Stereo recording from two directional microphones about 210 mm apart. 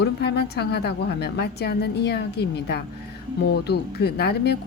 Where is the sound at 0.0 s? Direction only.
50° left (ahead or behind).